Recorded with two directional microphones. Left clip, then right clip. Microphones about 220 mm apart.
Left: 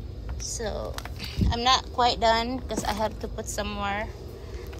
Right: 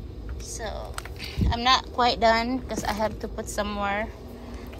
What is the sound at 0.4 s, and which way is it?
A woman's voice, 20° left (ahead or behind).